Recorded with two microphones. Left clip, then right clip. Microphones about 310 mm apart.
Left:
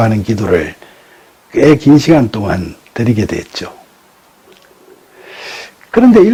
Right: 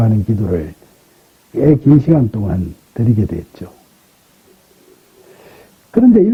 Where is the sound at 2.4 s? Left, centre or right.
Centre.